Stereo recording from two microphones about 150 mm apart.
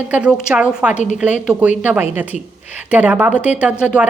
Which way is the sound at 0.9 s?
55° left (ahead or behind).